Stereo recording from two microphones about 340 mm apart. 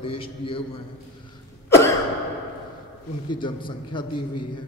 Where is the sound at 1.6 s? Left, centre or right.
Centre.